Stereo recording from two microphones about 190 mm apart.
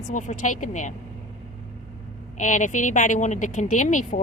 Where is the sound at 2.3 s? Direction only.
40° left (ahead or behind).